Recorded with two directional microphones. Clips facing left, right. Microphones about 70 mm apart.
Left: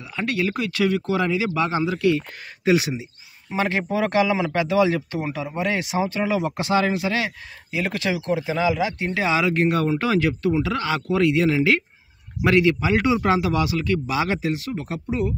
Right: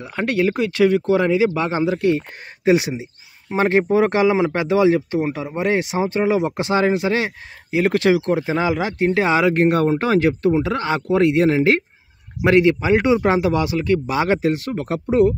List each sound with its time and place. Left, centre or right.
0.0 s speech: right